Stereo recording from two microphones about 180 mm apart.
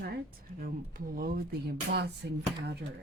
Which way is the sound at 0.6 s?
50° right (ahead or behind).